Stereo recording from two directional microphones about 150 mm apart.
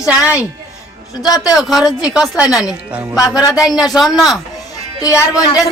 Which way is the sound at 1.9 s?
25° left (ahead or behind).